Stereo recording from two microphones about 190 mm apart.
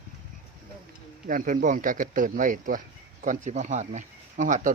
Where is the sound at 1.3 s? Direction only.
45° right (ahead or behind).